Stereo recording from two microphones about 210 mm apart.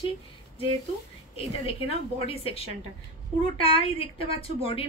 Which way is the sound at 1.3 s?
25° left (ahead or behind).